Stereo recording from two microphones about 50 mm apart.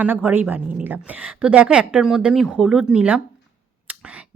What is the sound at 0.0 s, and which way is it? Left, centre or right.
Speech, right.